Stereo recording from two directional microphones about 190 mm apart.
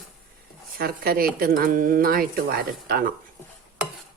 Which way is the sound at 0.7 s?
50° right (ahead or behind).